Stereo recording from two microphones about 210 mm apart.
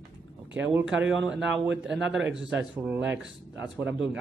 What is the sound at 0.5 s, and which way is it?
Speech, 10° right (ahead or behind).